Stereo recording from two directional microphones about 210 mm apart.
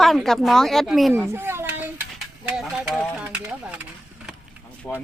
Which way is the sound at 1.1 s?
10° right (ahead or behind).